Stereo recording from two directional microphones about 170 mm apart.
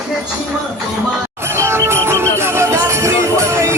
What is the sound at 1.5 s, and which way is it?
Music, 15° right (ahead or behind).